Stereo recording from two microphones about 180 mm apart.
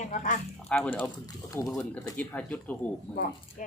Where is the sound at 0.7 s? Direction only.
10° left (ahead or behind).